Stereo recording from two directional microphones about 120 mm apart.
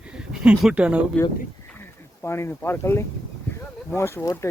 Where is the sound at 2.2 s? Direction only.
20° left (ahead or behind).